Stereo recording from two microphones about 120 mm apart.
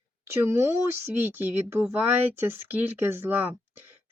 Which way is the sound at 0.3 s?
20° right (ahead or behind).